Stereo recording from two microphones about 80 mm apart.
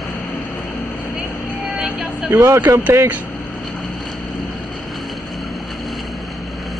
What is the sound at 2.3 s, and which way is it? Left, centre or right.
Speech, right.